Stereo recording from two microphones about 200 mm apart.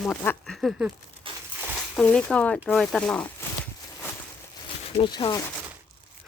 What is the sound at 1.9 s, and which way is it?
Speech, 5° left (ahead or behind).